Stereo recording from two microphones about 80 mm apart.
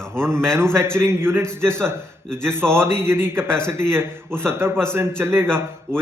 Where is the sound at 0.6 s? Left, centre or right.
Right.